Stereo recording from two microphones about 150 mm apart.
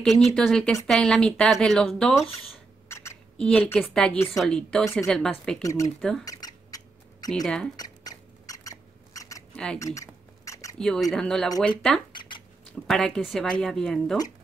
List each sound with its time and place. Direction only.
0.0 s speech: centre (ahead or behind)
2.9 s rodents: 15° left (ahead or behind)
3.3 s a woman's voice: 10° left (ahead or behind)
5.6 s speech: 20° left (ahead or behind)
5.9 s speech: 5° left (ahead or behind)
6.2 s mouse: 25° left (ahead or behind)
7.4 s speech: 5° left (ahead or behind)
7.7 s rodents: 25° left (ahead or behind)
9.8 s mouse: 20° left (ahead or behind)
11.1 s speech: 5° left (ahead or behind)
12.1 s a sound: 30° left (ahead or behind)
12.8 s speech: 5° left (ahead or behind)